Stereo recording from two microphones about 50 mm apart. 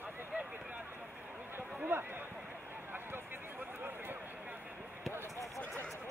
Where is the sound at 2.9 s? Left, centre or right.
Right.